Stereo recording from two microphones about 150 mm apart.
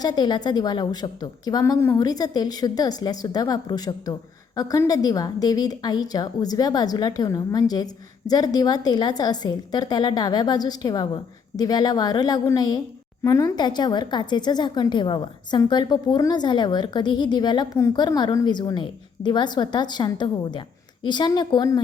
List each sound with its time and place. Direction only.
0.0 s a woman's voice: 25° left (ahead or behind)